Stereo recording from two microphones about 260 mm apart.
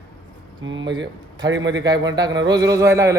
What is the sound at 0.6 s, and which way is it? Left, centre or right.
Speech, right.